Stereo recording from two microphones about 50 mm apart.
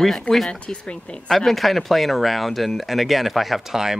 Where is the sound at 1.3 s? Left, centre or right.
Centre.